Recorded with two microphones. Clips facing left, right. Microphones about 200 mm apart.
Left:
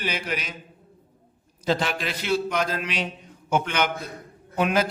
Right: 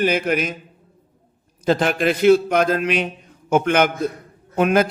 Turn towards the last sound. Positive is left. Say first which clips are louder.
# right 6 dB
turn(degrees=-50)  # may be behind; listen again after turning